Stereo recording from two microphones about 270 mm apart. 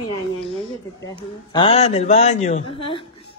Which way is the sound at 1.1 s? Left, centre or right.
Centre.